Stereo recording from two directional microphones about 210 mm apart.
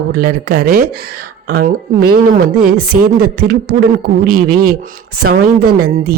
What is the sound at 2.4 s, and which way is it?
Speech, 90° right.